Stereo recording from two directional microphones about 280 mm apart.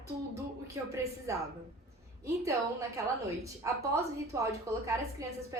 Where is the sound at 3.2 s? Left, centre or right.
Centre.